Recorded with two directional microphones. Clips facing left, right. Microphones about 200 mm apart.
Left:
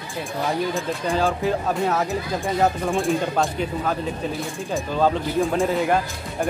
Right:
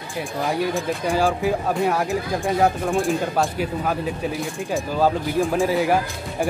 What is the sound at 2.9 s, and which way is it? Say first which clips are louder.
Speech: even; centre (ahead or behind).